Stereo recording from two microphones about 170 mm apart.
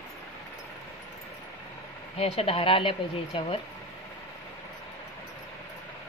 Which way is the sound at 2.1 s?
35° left (ahead or behind).